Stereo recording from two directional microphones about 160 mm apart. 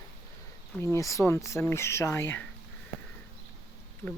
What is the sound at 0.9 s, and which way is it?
Speech, 20° left (ahead or behind).